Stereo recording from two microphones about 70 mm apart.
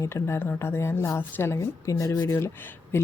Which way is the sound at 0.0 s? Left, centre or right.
Left.